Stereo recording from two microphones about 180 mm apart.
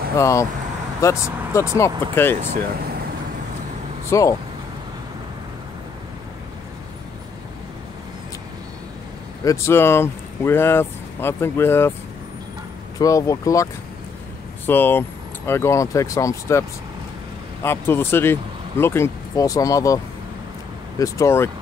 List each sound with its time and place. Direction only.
0.2 s speech: 15° left (ahead or behind)
4.1 s speech: 20° left (ahead or behind)
9.4 s speech: 15° left (ahead or behind)
13.0 s speech: 20° left (ahead or behind)
14.7 s speech: 10° left (ahead or behind)
21.0 s speech: 15° left (ahead or behind)